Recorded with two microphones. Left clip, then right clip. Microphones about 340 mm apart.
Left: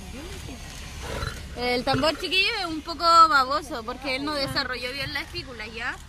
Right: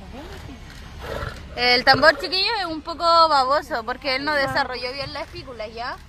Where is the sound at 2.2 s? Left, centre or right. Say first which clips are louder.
Right 1 dB; centre.